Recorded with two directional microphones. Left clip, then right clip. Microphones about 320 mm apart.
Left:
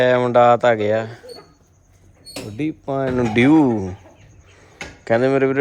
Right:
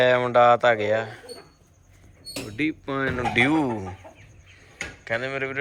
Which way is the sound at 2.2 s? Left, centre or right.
Centre.